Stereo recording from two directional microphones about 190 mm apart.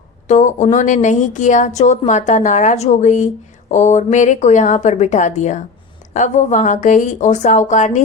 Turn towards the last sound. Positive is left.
turn(degrees=40)  # may be behind; listen again after turning